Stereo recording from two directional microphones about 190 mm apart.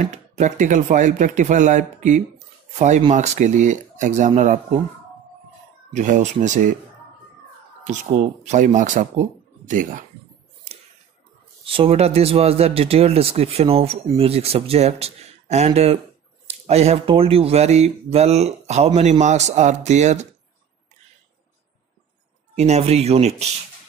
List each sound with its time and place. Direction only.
0.0 s speech: 40° right (ahead or behind)
5.9 s speech: 40° right (ahead or behind)
8.5 s speech: 40° right (ahead or behind)
11.6 s speech: 30° right (ahead or behind)
22.6 s speech: 35° right (ahead or behind)